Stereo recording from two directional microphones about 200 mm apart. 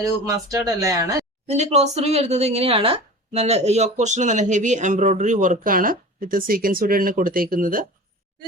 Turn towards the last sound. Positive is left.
turn(degrees=-45)  # may be behind; listen again after turning